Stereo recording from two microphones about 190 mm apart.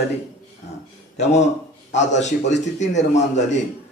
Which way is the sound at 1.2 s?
35° left (ahead or behind).